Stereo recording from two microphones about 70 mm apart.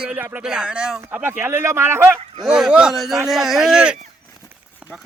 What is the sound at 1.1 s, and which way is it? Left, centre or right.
Speech, right.